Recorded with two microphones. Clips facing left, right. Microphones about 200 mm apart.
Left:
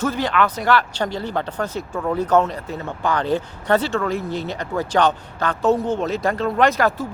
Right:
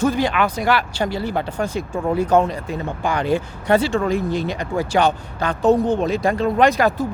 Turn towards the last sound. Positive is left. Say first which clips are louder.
# right 2 dB
turn(degrees=-15)  # may be behind; listen again after turning